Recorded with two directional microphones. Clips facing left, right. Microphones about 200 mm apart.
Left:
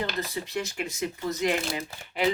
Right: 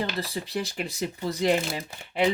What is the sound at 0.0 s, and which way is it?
Speech, 35° right (ahead or behind).